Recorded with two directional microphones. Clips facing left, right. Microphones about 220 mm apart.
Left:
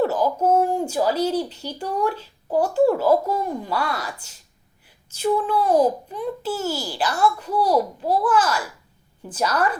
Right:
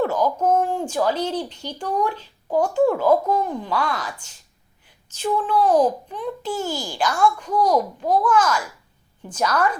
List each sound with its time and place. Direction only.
0.1 s a sound: 5° left (ahead or behind)
0.8 s speech: 10° left (ahead or behind)
8.2 s a child's voice: 35° left (ahead or behind)